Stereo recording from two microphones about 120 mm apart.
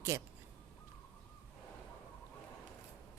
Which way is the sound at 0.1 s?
25° right (ahead or behind).